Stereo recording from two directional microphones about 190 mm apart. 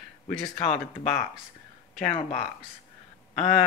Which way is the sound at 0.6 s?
40° left (ahead or behind).